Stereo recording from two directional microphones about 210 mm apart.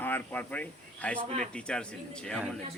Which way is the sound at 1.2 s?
35° right (ahead or behind).